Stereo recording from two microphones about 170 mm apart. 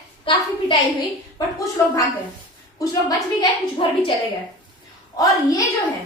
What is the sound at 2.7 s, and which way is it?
A woman's voice, 20° left (ahead or behind).